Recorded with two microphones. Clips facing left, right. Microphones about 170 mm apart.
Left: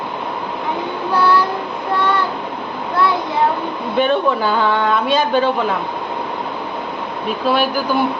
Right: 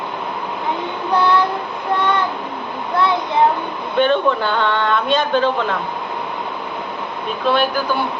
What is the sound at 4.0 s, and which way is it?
Speech, 5° left (ahead or behind).